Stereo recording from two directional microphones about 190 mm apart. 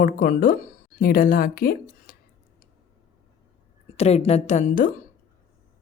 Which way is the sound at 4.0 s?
35° left (ahead or behind).